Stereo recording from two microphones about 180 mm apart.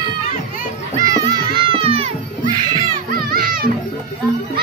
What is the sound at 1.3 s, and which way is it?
Music, 25° right (ahead or behind).